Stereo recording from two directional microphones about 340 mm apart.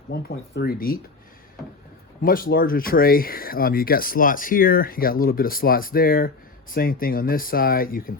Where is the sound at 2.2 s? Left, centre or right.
Left.